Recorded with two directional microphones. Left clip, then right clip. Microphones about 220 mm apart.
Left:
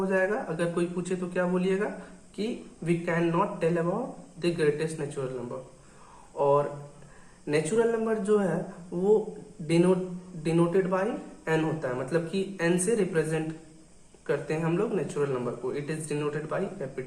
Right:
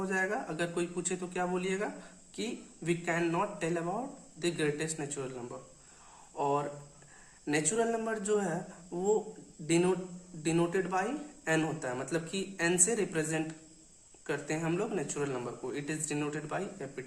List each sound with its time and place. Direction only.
0.1 s a man's voice: 50° right (ahead or behind)
6.3 s a man's voice: 50° right (ahead or behind)
9.6 s a man's voice: 50° right (ahead or behind)